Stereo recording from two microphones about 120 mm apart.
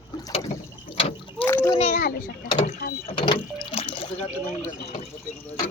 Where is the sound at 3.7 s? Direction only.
50° left (ahead or behind).